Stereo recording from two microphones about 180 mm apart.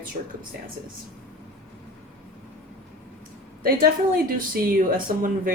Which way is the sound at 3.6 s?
55° right (ahead or behind).